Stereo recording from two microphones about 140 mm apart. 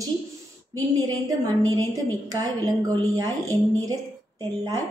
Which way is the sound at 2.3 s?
25° right (ahead or behind).